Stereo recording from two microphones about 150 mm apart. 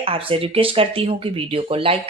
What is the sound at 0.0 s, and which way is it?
A woman's voice, 40° right (ahead or behind).